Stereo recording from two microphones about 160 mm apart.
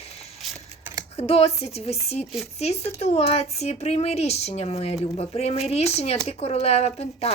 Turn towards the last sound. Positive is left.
turn(degrees=40)  # may be behind; listen again after turning